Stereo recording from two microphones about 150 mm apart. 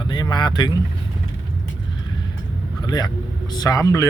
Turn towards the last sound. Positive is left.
turn(degrees=20)  # may be behind; listen again after turning